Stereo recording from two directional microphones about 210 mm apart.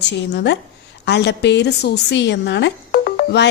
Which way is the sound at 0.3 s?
55° left (ahead or behind).